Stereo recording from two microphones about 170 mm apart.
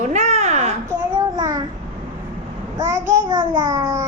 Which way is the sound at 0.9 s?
20° right (ahead or behind).